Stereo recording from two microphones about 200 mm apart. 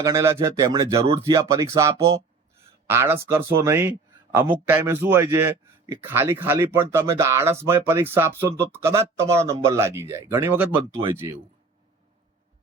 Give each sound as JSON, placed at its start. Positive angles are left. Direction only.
{"t": 0.0, "sound": "speech", "side_deg": -15}